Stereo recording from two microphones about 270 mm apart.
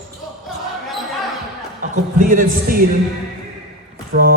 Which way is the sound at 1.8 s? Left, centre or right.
Right.